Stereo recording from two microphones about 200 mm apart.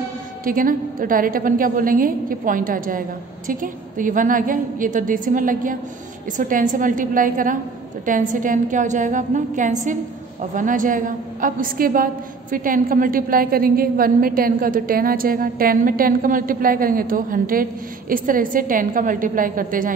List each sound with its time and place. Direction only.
0.5 s a woman's voice: 45° right (ahead or behind)